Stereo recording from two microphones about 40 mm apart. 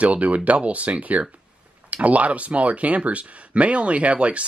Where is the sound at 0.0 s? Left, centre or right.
Right.